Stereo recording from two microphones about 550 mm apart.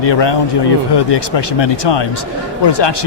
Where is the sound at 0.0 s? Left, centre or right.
Left.